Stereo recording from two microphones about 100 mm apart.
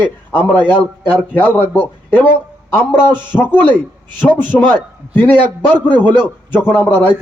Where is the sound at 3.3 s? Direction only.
20° left (ahead or behind).